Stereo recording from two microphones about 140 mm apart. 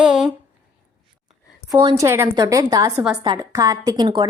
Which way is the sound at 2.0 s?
20° right (ahead or behind).